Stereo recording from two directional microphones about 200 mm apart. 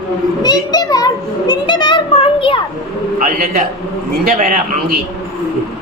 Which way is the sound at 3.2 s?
45° right (ahead or behind).